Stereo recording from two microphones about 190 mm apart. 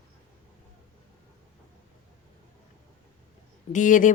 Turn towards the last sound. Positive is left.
turn(degrees=45)  # may be behind; listen again after turning